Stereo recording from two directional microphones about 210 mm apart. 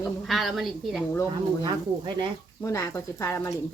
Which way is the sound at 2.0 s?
20° right (ahead or behind).